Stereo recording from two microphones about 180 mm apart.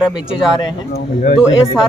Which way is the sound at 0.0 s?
5° right (ahead or behind).